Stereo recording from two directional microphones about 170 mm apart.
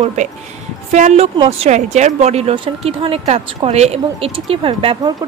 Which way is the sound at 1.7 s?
45° right (ahead or behind).